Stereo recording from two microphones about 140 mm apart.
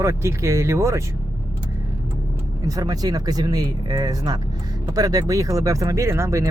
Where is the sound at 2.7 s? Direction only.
25° right (ahead or behind).